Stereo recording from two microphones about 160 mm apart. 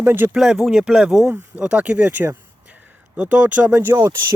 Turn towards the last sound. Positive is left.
turn(degrees=-15)  # may be behind; listen again after turning